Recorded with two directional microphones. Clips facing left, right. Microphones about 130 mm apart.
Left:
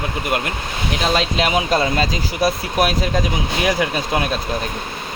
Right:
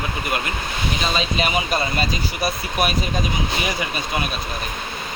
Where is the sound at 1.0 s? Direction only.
75° left (ahead or behind).